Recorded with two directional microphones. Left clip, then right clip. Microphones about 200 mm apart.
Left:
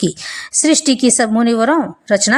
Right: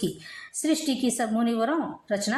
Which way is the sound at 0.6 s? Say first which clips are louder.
Left 13 dB; 35° left (ahead or behind).